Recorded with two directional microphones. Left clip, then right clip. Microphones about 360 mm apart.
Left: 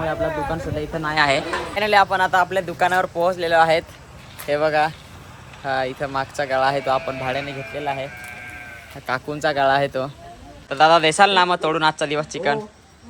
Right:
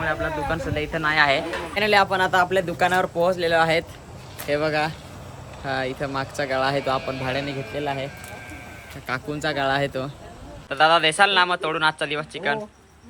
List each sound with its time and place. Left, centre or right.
0.0 s a man's voice: centre